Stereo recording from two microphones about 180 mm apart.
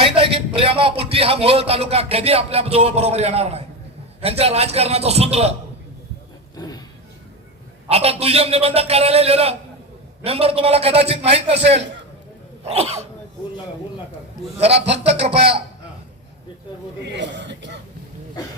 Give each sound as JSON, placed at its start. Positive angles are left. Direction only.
{"t": 0.0, "sound": "a man's voice", "side_deg": -30}
{"t": 6.6, "sound": "a sound", "side_deg": 20}
{"t": 7.9, "sound": "a man's voice", "side_deg": -35}
{"t": 12.6, "sound": "a man's voice", "side_deg": -35}
{"t": 14.6, "sound": "a man's voice", "side_deg": -35}
{"t": 17.1, "sound": "a man's voice", "side_deg": -75}